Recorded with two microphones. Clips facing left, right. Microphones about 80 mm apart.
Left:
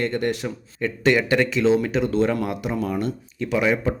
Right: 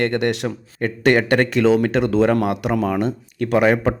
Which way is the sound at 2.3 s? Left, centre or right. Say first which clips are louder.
Right 6 dB; right.